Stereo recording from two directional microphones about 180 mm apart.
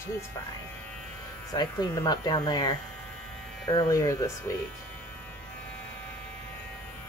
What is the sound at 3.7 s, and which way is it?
Speech, 20° left (ahead or behind).